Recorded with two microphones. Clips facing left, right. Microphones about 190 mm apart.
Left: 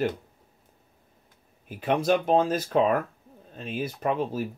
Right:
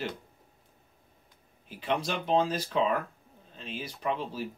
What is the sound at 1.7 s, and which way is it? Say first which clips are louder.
Speech: left 8 dB; 50° left (ahead or behind).